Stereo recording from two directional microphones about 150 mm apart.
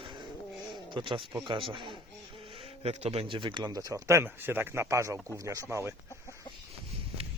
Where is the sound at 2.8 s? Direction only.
45° right (ahead or behind); by 5.9 s 20° right (ahead or behind).